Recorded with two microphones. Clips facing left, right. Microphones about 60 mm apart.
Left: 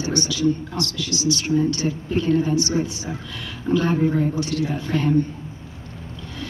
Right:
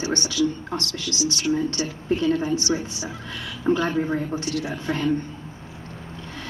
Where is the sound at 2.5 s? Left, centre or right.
Left.